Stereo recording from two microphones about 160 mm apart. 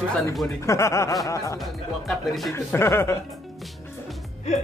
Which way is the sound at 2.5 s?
15° left (ahead or behind).